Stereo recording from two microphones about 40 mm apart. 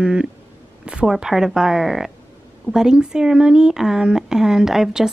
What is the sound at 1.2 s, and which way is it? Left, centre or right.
Speech, centre.